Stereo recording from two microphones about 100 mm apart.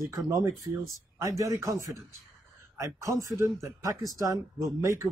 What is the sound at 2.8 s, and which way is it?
Speech, 30° right (ahead or behind).